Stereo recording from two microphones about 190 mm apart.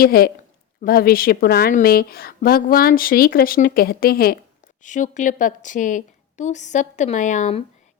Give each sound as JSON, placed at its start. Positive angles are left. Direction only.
{"t": 0.0, "sound": "a woman's voice", "side_deg": 50}
{"t": 4.8, "sound": "a woman's voice", "side_deg": 40}